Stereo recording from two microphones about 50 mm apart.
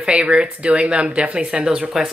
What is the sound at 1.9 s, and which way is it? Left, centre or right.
Speech, centre.